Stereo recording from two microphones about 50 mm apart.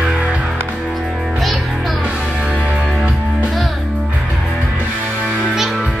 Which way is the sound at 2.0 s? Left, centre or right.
Right.